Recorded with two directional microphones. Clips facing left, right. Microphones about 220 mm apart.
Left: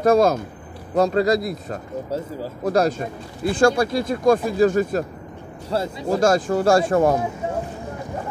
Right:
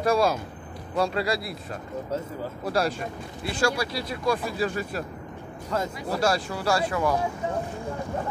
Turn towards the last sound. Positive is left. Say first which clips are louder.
# left 8 dB
turn(degrees=45)  # may be behind; listen again after turning